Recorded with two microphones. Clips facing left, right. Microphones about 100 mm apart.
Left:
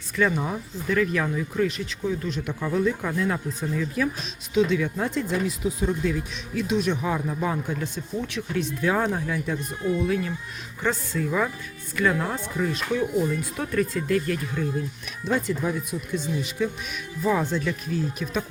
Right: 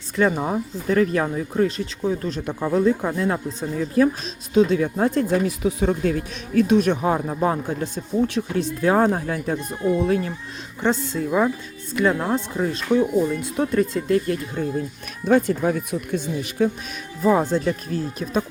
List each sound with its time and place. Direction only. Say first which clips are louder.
0.2 s speech: right 4 dB; 35° right (ahead or behind)
4.5 s speech: right 4 dB; 40° right (ahead or behind)
10.8 s speech: right 4 dB; 25° right (ahead or behind)
15.2 s speech: right 7 dB; 50° right (ahead or behind)
17.2 s speech: right 5 dB; 40° right (ahead or behind)